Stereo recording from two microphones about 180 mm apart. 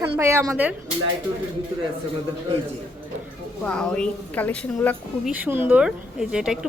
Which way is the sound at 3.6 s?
5° left (ahead or behind).